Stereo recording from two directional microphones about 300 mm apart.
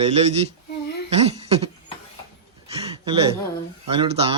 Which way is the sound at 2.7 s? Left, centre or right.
Centre.